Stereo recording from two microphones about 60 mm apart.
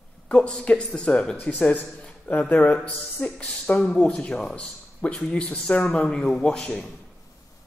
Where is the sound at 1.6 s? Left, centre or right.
Left.